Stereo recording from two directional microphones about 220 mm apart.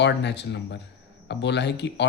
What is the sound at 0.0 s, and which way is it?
A man's voice, 50° left (ahead or behind).